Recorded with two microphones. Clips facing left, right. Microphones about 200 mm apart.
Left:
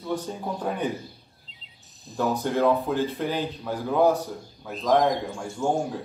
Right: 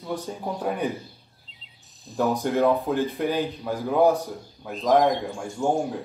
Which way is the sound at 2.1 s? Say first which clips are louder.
Right 2 dB; 15° right (ahead or behind).